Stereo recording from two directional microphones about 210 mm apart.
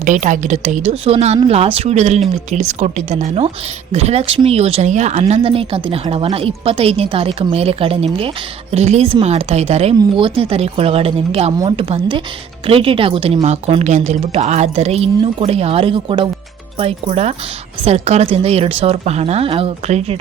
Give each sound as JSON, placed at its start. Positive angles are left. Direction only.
{"t": 0.0, "sound": "a woman's voice", "side_deg": -35}